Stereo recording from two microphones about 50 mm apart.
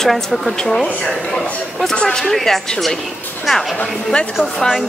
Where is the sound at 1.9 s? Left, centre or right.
Centre.